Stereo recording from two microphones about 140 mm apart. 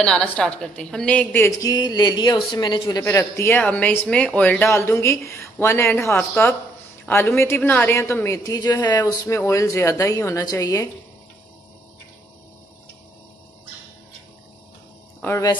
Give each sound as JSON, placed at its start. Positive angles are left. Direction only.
{"t": 0.0, "sound": "a woman's voice", "side_deg": 5}
{"t": 1.6, "sound": "speech", "side_deg": 30}
{"t": 3.0, "sound": "a woman's voice", "side_deg": 20}